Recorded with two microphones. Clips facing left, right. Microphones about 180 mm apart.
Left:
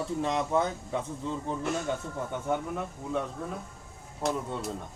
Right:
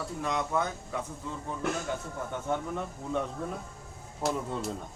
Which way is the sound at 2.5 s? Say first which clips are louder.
Left 1 dB; centre (ahead or behind).